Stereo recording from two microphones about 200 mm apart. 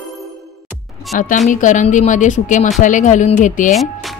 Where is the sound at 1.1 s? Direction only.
40° left (ahead or behind).